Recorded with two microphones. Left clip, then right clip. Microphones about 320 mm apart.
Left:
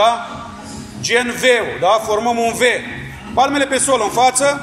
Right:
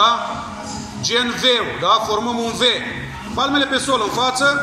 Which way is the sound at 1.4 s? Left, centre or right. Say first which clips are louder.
Left 4 dB; left.